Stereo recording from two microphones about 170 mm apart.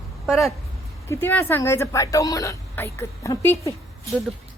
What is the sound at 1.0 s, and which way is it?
A woman's voice, 15° left (ahead or behind).